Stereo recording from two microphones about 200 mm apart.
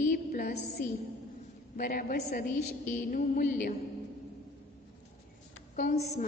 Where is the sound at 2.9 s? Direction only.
40° left (ahead or behind).